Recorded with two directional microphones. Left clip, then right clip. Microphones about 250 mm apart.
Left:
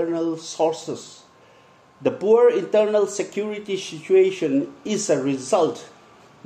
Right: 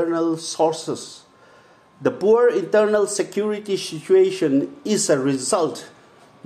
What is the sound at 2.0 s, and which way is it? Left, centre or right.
A man's voice, centre.